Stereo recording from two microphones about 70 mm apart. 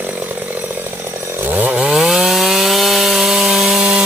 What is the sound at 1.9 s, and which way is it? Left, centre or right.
Wood, centre.